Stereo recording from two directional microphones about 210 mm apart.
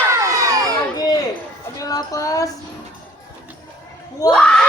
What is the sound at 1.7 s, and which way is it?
Music, 15° left (ahead or behind).